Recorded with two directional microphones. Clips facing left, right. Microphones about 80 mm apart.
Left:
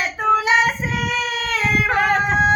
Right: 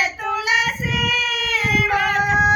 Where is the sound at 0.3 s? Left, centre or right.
Left.